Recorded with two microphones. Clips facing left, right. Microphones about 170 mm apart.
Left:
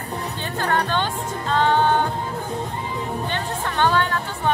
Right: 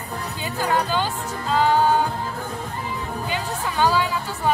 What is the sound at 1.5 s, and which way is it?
Music, 5° right (ahead or behind).